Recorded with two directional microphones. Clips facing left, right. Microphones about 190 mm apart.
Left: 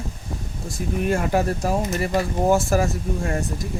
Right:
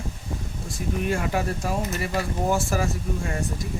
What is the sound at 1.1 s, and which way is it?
Speech, 45° left (ahead or behind).